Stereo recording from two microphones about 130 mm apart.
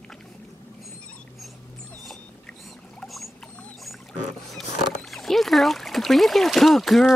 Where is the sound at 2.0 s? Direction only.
Centre (ahead or behind).